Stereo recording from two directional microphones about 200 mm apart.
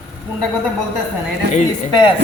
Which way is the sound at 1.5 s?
35° left (ahead or behind).